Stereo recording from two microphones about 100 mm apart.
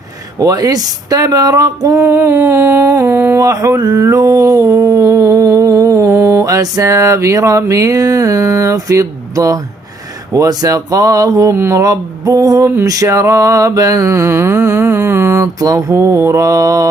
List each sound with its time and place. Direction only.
0.3 s speech: 35° right (ahead or behind)
10.3 s mantra: 35° right (ahead or behind)